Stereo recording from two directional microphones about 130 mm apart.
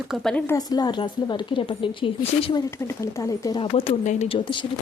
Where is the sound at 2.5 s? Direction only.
25° left (ahead or behind).